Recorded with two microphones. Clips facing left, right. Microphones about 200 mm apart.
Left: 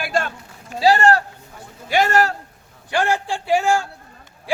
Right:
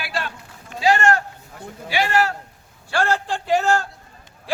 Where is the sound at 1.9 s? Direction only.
45° left (ahead or behind).